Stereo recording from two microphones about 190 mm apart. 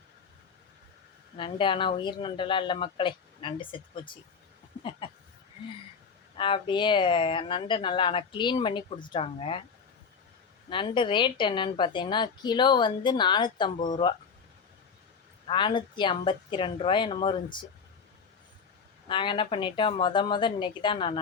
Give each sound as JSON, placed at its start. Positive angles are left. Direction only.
{"t": 1.4, "sound": "speech", "side_deg": 25}
{"t": 4.8, "sound": "a sound", "side_deg": 25}
{"t": 6.3, "sound": "speech", "side_deg": 25}
{"t": 10.7, "sound": "speech", "side_deg": 25}
{"t": 15.4, "sound": "speech", "side_deg": 25}
{"t": 19.0, "sound": "speech", "side_deg": 25}